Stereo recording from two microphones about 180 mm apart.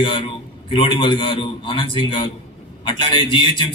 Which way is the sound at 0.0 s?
25° left (ahead or behind).